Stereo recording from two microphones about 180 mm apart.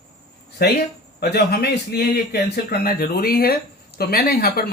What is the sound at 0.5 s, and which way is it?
Speech, 65° left (ahead or behind).